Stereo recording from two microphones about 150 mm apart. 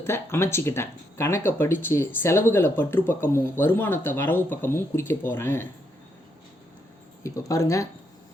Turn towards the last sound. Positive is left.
turn(degrees=20)  # may be behind; listen again after turning